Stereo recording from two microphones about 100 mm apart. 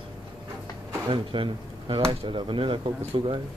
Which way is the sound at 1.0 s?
60° right (ahead or behind).